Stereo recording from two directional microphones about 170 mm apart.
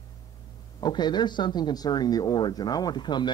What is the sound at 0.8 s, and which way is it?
Speech, 25° left (ahead or behind).